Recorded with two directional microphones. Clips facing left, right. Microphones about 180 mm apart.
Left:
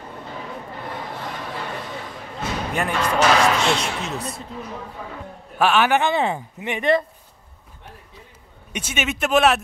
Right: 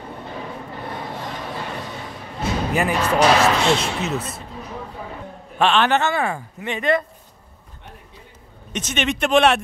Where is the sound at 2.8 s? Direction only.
5° right (ahead or behind).